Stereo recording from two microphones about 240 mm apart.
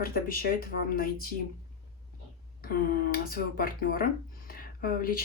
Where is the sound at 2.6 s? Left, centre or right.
Left.